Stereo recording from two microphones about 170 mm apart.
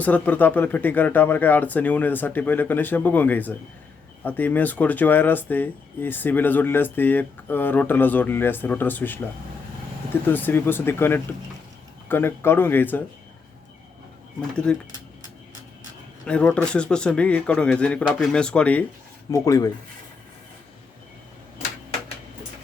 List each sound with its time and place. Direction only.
0.0 s speech: 10° left (ahead or behind)
10.2 s speech: 10° left (ahead or behind)
14.5 s speech: 5° left (ahead or behind)
16.2 s speech: 5° left (ahead or behind)
19.3 s speech: 20° left (ahead or behind)